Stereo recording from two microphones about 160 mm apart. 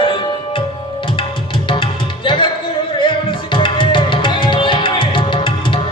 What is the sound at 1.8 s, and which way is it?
Music, 30° left (ahead or behind).